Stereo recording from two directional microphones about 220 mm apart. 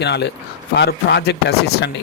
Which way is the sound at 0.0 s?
50° left (ahead or behind).